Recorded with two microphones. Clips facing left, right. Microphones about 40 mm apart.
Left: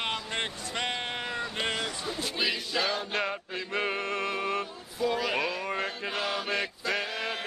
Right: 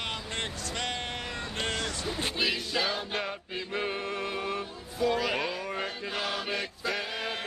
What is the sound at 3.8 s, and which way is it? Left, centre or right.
Music, left.